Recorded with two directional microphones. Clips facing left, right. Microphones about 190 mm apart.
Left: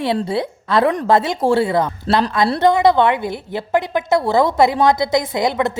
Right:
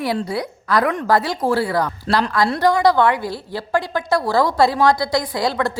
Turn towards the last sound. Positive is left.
turn(degrees=20)  # may be behind; listen again after turning